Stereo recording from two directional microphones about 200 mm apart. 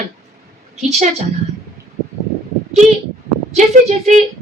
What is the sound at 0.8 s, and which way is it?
Speech, 35° right (ahead or behind).